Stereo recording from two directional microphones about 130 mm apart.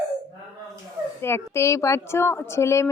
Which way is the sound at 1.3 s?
20° left (ahead or behind).